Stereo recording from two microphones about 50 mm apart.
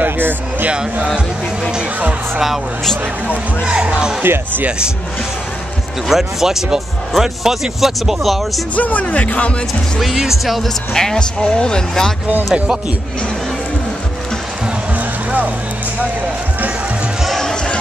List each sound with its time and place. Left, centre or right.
0.0 s a sound: right
0.7 s speech: right
4.2 s speech: right
4.6 s speech: centre
6.0 s speech: centre
8.7 s speech: left
9.9 s speech: centre
15.0 s music: right
17.4 s run: centre